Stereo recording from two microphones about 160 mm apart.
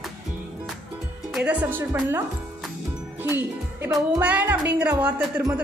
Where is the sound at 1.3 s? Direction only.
10° right (ahead or behind).